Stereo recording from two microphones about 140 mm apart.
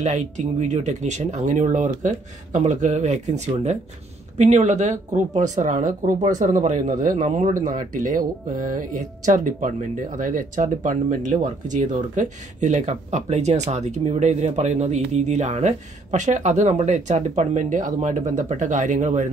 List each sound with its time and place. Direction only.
0.0 s speech: 60° right (ahead or behind)